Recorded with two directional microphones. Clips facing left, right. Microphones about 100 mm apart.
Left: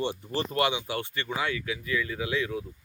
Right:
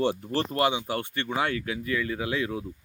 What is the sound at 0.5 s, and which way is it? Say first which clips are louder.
Speech: right 1 dB; 40° right (ahead or behind).